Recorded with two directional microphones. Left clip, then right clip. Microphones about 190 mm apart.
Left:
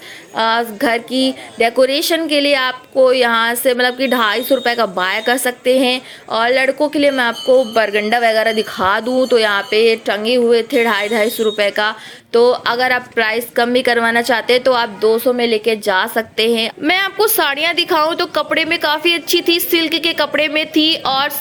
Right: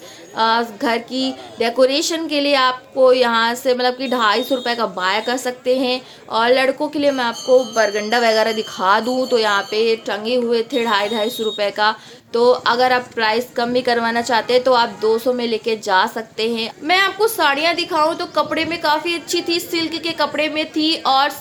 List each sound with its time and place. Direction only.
0.3 s speech: 20° left (ahead or behind)
8.0 s speech: 15° left (ahead or behind)
16.8 s a woman's voice: 40° left (ahead or behind)